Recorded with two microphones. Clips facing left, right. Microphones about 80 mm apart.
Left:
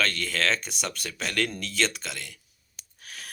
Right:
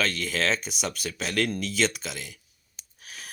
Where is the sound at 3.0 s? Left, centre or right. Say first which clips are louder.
Even; centre.